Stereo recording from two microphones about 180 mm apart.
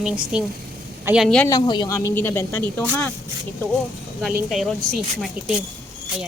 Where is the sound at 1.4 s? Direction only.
20° left (ahead or behind).